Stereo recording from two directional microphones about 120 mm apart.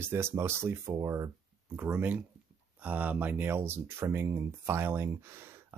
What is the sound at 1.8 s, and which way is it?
Speech, 15° right (ahead or behind).